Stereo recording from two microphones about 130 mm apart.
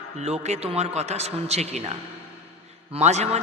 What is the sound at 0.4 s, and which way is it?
A man's voice, 55° right (ahead or behind).